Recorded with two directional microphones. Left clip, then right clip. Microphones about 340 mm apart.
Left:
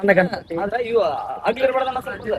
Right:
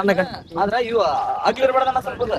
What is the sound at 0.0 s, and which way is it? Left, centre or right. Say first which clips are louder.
Speech: left 3 dB; centre.